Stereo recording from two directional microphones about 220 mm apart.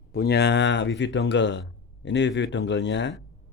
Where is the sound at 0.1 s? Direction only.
45° left (ahead or behind).